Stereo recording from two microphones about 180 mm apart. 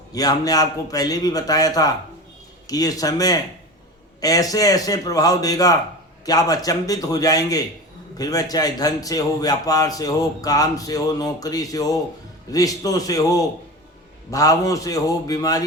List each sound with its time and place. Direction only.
0.1 s a man's voice: 20° left (ahead or behind)